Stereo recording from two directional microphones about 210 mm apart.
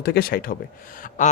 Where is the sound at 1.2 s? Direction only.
35° left (ahead or behind).